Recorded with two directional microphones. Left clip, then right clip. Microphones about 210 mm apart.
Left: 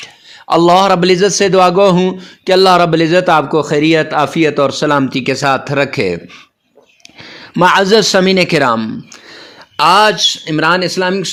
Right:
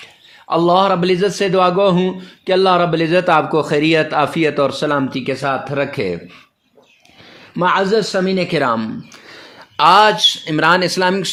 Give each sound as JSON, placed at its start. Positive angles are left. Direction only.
{"t": 0.0, "sound": "a man's voice", "side_deg": 30}
{"t": 7.5, "sound": "speech", "side_deg": 35}